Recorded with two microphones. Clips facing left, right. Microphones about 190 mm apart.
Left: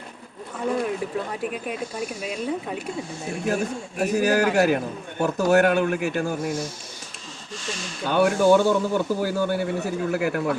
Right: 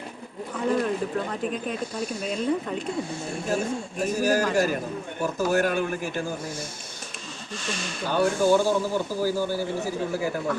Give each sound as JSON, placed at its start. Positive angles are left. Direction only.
{"t": 0.7, "sound": "speech", "side_deg": 5}
{"t": 3.4, "sound": "a man's voice", "side_deg": 65}
{"t": 7.6, "sound": "speech", "side_deg": -60}
{"t": 8.1, "sound": "a man's voice", "side_deg": 65}